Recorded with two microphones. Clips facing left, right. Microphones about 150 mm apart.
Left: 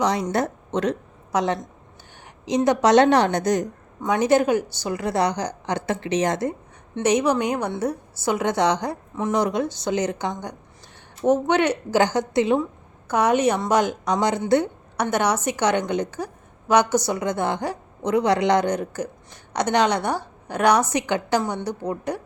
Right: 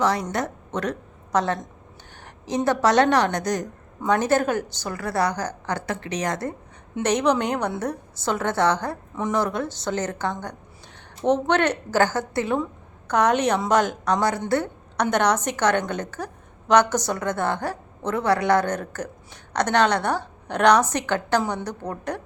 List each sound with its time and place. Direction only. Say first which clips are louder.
0.0 s a woman's voice: even; 20° left (ahead or behind)
0.3 s a woman's voice: left 4 dB; 30° left (ahead or behind); by 1.5 s 15° left (ahead or behind)
2.2 s a sound: left 4 dB; 15° left (ahead or behind)
2.6 s a woman's voice: left 3 dB; 20° left (ahead or behind)
7.0 s a woman's voice: left 1 dB; 10° left (ahead or behind)